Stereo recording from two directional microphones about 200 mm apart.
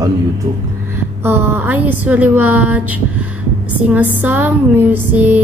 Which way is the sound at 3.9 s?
10° right (ahead or behind).